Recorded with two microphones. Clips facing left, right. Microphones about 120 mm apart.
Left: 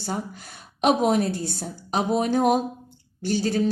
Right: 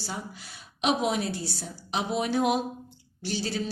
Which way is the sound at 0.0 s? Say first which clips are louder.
Left 7 dB; 50° left (ahead or behind).